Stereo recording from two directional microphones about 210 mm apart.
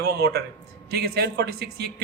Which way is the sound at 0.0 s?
50° right (ahead or behind).